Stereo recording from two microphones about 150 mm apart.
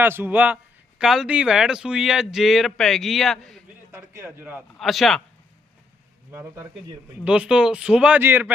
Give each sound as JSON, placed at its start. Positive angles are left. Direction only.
{"t": 0.0, "sound": "a man's voice", "side_deg": -15}
{"t": 3.9, "sound": "speech", "side_deg": -15}
{"t": 4.8, "sound": "a man's voice", "side_deg": 0}
{"t": 6.3, "sound": "speech", "side_deg": -20}
{"t": 7.3, "sound": "speech", "side_deg": -5}